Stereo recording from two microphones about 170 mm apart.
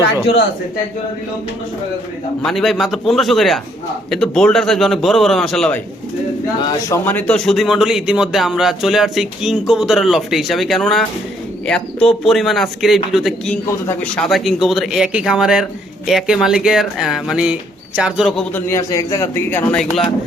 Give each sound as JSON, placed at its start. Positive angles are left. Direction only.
{"t": 0.0, "sound": "speech", "side_deg": 90}
{"t": 2.4, "sound": "speech", "side_deg": 0}
{"t": 6.6, "sound": "speech", "side_deg": 20}
{"t": 13.7, "sound": "a man's voice", "side_deg": 15}
{"t": 14.2, "sound": "speech", "side_deg": 0}
{"t": 18.5, "sound": "a man's voice", "side_deg": 15}